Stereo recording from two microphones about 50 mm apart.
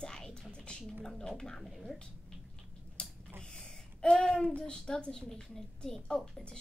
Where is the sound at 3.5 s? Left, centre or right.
Centre.